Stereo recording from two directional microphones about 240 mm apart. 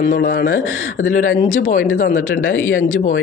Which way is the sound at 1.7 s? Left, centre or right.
Left.